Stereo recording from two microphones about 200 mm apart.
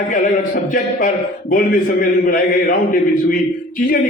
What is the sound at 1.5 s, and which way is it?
A man's voice, 45° left (ahead or behind).